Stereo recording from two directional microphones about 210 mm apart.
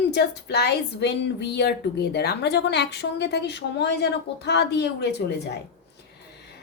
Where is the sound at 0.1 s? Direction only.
55° left (ahead or behind).